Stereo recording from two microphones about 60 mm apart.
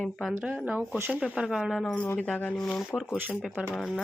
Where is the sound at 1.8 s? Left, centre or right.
Centre.